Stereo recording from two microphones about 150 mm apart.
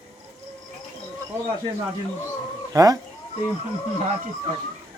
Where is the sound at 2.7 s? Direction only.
25° right (ahead or behind).